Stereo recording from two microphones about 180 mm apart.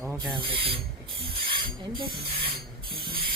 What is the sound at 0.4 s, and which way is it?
Speech, 30° right (ahead or behind).